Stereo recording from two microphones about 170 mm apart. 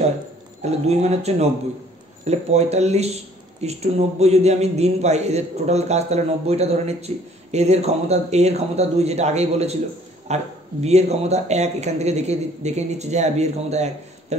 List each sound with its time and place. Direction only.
0.6 s speech: 40° right (ahead or behind)